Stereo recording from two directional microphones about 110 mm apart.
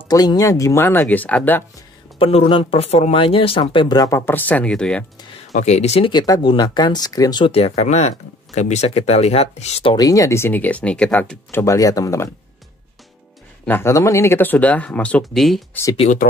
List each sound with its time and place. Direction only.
0.1 s speech: 35° left (ahead or behind); by 1.6 s 15° left (ahead or behind)
2.1 s speech: 60° left (ahead or behind)
4.3 s speech: 15° left (ahead or behind)
5.5 s speech: 90° left
6.2 s speech: 35° left (ahead or behind)
7.5 s speech: 75° left (ahead or behind)
9.9 s speech: 30° left (ahead or behind); by 11.6 s 15° left (ahead or behind)
11.6 s speech: 30° left (ahead or behind)
13.7 s speech: 20° left (ahead or behind); by 15.6 s centre (ahead or behind)
15.7 s speech: 30° left (ahead or behind)